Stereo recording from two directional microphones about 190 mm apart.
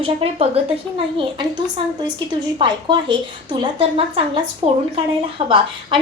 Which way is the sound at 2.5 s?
25° right (ahead or behind).